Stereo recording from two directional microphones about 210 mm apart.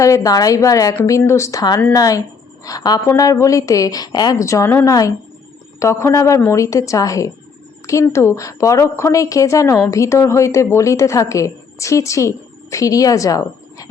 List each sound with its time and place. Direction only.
0.0 s a woman's voice: 15° left (ahead or behind)